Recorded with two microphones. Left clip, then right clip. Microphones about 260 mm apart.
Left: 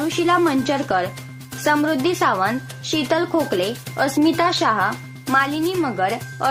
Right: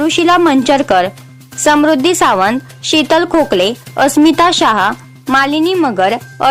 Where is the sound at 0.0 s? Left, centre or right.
Right.